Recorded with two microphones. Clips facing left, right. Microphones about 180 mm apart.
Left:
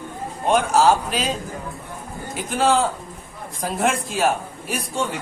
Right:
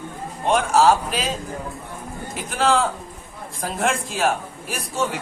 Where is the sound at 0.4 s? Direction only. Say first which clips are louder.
Even; centre (ahead or behind).